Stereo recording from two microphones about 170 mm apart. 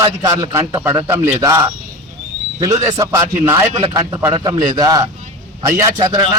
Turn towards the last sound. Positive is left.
turn(degrees=-20)  # may be behind; listen again after turning